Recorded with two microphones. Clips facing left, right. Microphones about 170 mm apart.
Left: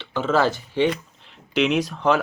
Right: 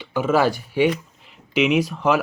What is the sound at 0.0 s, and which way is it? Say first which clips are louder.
Speech: right 2 dB; 10° right (ahead or behind).